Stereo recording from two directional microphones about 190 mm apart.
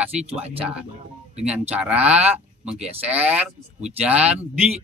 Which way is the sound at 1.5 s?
5° right (ahead or behind).